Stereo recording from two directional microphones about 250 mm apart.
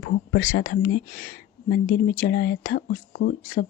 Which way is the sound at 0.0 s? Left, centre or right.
Left.